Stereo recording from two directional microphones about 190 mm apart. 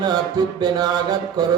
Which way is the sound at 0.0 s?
20° right (ahead or behind).